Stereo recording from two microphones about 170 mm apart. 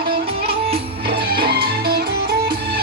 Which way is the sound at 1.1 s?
65° right (ahead or behind).